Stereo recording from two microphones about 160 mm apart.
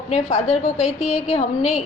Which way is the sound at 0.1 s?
45° left (ahead or behind).